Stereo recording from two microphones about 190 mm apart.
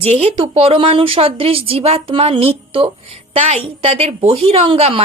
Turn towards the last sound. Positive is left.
turn(degrees=-30)  # may be behind; listen again after turning